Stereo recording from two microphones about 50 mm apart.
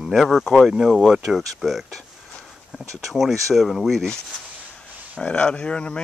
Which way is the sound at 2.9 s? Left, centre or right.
Centre.